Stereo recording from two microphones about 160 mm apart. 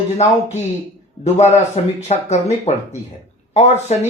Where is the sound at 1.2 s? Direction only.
45° left (ahead or behind).